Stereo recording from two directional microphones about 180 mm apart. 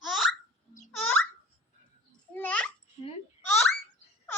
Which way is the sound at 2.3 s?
10° left (ahead or behind).